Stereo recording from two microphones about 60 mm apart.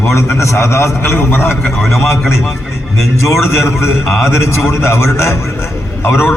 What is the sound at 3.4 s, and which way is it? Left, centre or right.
A man's voice, left.